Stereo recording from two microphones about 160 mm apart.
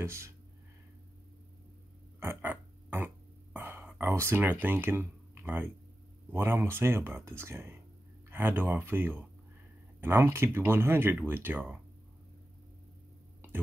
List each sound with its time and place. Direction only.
0.0 s speech: 15° right (ahead or behind)
2.1 s burping: 15° right (ahead or behind)
3.5 s speech: 10° right (ahead or behind)